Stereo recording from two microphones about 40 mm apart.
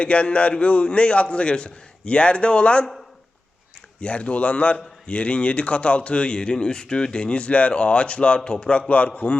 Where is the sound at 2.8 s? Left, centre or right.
Centre.